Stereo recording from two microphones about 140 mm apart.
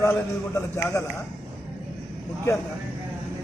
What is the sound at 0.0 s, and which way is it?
A man's voice, 20° left (ahead or behind).